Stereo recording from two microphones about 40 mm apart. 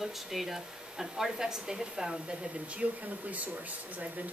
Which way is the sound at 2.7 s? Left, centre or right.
Right.